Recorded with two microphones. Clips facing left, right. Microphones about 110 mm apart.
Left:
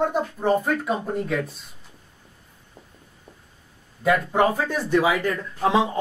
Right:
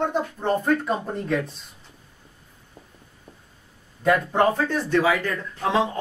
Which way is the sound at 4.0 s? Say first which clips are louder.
Even; 5° left (ahead or behind).